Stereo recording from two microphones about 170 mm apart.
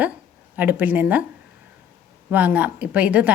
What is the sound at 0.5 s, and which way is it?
Speech, 10° right (ahead or behind).